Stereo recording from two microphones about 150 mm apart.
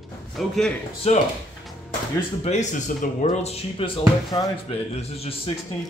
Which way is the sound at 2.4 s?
50° left (ahead or behind).